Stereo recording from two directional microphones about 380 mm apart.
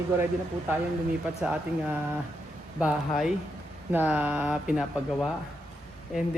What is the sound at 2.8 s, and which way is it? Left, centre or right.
Speech, centre.